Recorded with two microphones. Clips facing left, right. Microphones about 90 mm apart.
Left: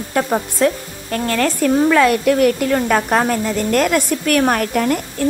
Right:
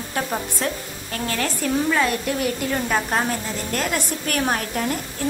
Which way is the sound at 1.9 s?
85° left.